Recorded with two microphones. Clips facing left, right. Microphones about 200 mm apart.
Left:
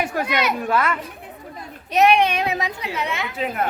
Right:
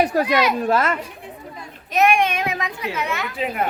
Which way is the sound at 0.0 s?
35° right (ahead or behind).